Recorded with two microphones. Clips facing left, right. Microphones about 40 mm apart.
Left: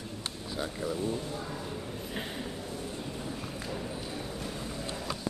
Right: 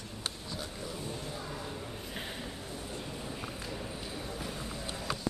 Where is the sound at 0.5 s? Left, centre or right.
Centre.